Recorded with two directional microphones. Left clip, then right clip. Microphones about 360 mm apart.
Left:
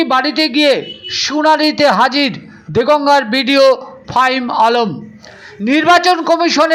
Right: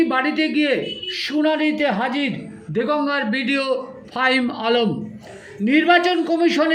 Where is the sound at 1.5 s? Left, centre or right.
Left.